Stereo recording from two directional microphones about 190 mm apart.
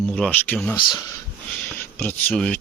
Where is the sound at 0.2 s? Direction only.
5° left (ahead or behind).